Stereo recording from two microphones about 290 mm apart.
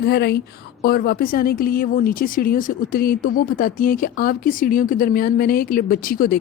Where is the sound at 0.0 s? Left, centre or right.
Left.